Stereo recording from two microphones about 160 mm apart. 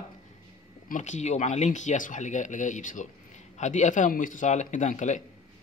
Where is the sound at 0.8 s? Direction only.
50° left (ahead or behind).